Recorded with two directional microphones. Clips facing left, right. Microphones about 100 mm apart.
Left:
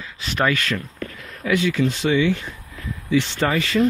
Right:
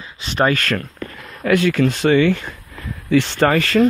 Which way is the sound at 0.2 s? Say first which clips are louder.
Right 4 dB; 30° right (ahead or behind).